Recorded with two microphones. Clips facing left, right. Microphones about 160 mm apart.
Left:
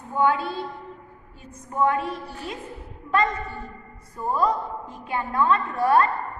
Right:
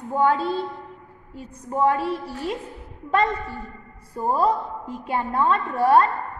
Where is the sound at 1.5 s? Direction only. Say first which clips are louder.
Right 2 dB; 30° right (ahead or behind).